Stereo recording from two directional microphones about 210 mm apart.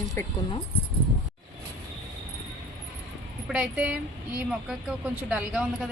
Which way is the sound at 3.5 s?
5° right (ahead or behind).